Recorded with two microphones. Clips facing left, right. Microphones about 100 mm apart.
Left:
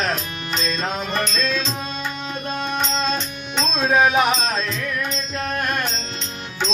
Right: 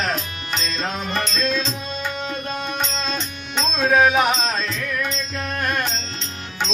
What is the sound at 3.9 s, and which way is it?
Music, 20° left (ahead or behind).